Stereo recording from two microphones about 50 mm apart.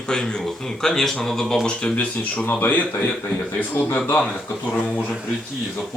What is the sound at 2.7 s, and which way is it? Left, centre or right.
A man's voice, left.